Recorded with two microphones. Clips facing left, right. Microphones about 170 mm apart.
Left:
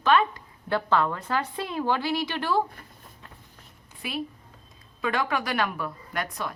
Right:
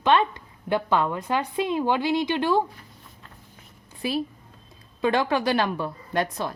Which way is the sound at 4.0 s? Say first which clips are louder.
Right 6 dB; 35° right (ahead or behind).